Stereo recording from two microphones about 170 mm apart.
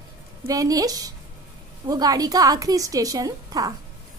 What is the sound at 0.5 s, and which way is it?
A woman's voice, 20° right (ahead or behind).